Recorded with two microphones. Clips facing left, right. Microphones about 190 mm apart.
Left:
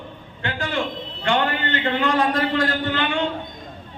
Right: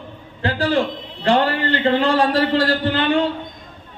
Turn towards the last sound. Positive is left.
turn(degrees=-35)  # may be behind; listen again after turning